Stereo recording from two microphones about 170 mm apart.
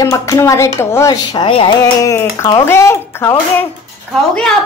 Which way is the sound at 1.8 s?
20° left (ahead or behind).